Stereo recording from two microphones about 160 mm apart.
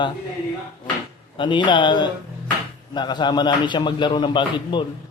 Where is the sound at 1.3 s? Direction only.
30° left (ahead or behind).